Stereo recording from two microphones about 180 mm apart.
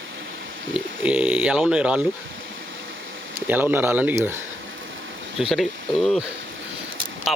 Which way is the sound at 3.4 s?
10° right (ahead or behind).